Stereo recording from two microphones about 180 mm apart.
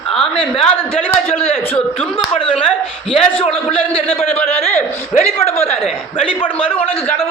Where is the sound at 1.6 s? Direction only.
10° left (ahead or behind).